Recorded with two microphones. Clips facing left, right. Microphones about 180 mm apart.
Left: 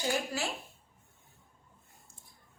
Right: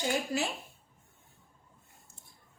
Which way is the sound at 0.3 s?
20° right (ahead or behind).